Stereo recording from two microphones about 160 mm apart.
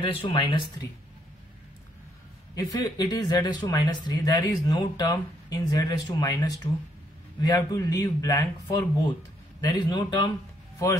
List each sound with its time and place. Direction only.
0.0 s speech: 35° left (ahead or behind)
2.5 s speech: 25° left (ahead or behind)